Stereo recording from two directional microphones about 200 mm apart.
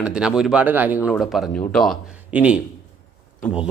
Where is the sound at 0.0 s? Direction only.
5° right (ahead or behind).